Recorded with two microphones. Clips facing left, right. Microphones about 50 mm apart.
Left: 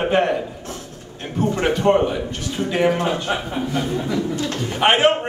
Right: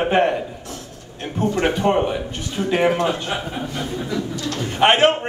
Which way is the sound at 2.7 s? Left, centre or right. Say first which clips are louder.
Right 1 dB; right.